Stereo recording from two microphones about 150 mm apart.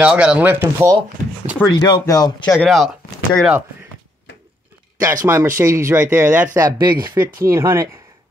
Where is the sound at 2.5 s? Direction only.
Centre (ahead or behind).